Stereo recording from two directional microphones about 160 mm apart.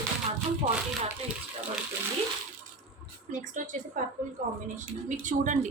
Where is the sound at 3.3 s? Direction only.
50° right (ahead or behind).